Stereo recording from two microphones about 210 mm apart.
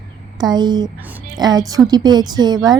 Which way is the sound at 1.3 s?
20° right (ahead or behind).